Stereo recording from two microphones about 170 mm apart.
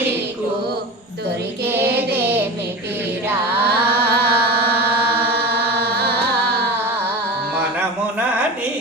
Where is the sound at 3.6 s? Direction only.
70° right (ahead or behind).